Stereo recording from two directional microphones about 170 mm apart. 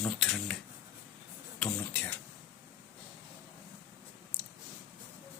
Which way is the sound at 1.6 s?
10° left (ahead or behind).